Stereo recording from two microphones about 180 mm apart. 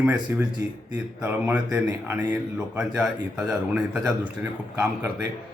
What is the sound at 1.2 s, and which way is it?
Speech, 15° right (ahead or behind).